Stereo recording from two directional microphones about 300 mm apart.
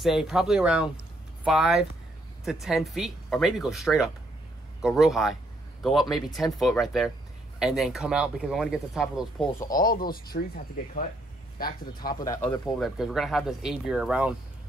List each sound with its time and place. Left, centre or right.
0.0 s speech: centre
9.8 s speech: left
12.2 s speech: centre